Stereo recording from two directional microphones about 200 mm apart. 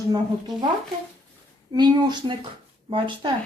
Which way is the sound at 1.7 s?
20° right (ahead or behind).